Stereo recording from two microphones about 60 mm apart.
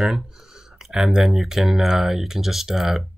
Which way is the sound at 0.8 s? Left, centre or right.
Centre.